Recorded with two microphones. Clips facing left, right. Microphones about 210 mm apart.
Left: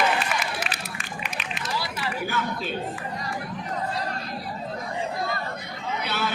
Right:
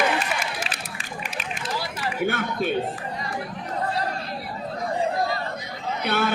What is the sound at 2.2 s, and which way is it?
Speech, 65° right (ahead or behind).